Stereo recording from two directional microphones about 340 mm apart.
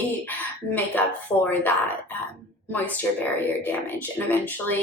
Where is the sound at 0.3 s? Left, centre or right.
Centre.